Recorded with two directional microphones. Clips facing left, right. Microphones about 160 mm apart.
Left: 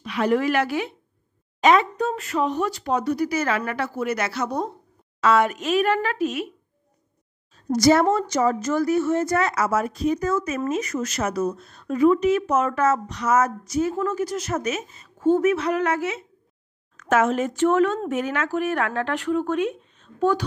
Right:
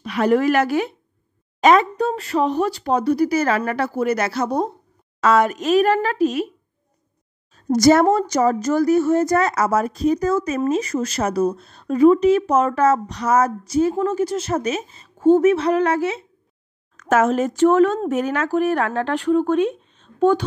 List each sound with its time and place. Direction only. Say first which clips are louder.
0.0 s a woman's voice: right 4 dB; 45° right (ahead or behind)
7.7 s speech: right 4 dB; 45° right (ahead or behind); by 20.4 s 25° right (ahead or behind)